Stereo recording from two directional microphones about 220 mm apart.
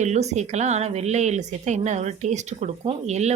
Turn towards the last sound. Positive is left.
turn(degrees=-30)  # may be behind; listen again after turning